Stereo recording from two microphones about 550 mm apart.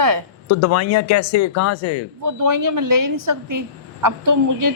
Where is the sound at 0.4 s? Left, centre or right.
Left.